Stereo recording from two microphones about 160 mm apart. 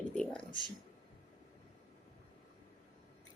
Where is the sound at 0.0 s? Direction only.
5° left (ahead or behind).